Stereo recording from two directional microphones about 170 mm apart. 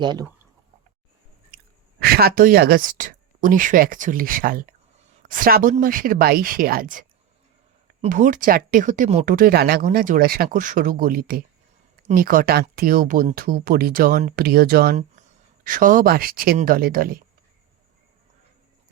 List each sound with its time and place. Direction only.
0.0 s speech: 25° right (ahead or behind)
2.0 s speech: 60° right (ahead or behind); by 9.2 s 45° right (ahead or behind)
9.2 s speech: 55° right (ahead or behind)
15.6 s speech: 50° right (ahead or behind)